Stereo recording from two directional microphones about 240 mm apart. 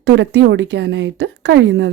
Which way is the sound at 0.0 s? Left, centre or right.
Right.